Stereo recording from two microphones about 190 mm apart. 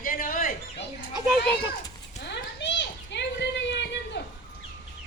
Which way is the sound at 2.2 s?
65° left (ahead or behind).